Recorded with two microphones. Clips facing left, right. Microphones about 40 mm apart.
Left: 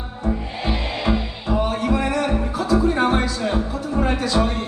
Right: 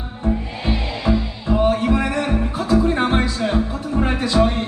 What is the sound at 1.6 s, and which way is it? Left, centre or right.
Music, right.